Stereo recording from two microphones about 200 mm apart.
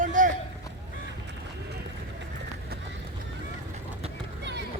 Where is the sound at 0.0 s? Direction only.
40° right (ahead or behind).